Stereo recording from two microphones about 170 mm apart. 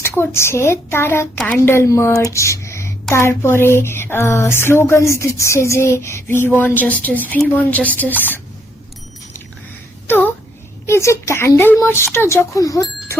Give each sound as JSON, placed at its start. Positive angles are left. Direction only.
{"t": 0.2, "sound": "speech", "side_deg": 15}
{"t": 10.1, "sound": "a sound", "side_deg": 10}
{"t": 10.8, "sound": "speech", "side_deg": 15}